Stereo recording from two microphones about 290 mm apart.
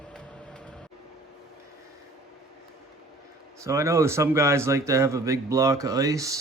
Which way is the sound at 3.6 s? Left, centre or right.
Centre.